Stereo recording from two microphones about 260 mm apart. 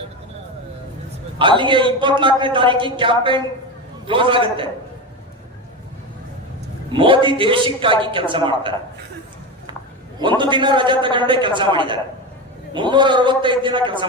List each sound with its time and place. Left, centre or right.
1.4 s a man's voice: centre
6.9 s a man's voice: centre
10.2 s a man's voice: centre